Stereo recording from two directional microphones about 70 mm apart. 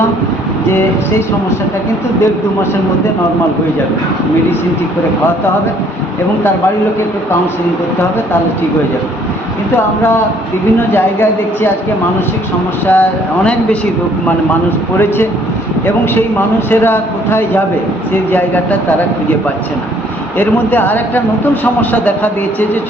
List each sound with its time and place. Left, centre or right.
10.8 s speech: left
12.9 s speech: centre
16.6 s speech: left
20.4 s speech: left